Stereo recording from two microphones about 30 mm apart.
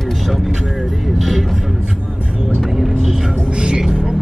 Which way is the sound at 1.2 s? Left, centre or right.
Centre.